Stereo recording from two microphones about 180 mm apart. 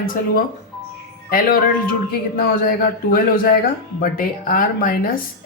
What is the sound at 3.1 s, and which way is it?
Speech, 55° left (ahead or behind).